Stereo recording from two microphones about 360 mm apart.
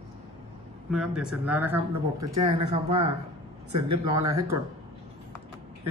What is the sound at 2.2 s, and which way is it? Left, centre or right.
Speech, right.